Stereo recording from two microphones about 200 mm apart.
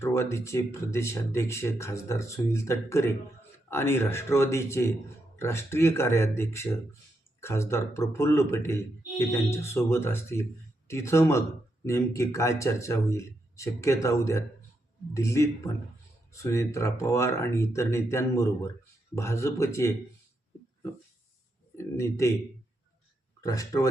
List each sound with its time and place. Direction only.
0.0 s speech: 15° left (ahead or behind)
21.8 s speech: 15° left (ahead or behind)
23.4 s speech: 15° left (ahead or behind)